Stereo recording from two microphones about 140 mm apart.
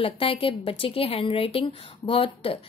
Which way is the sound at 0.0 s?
40° left (ahead or behind).